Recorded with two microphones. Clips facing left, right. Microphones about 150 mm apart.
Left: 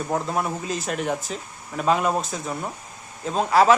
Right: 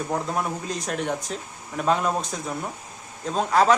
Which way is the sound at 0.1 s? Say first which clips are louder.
Left 3 dB; centre (ahead or behind).